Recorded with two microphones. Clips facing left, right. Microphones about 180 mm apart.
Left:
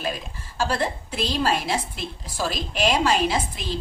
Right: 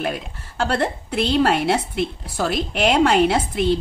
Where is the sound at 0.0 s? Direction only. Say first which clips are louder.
Right 4 dB; 60° right (ahead or behind).